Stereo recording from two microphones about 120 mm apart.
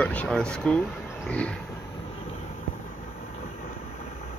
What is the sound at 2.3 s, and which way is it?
Vehicle, 75° left (ahead or behind).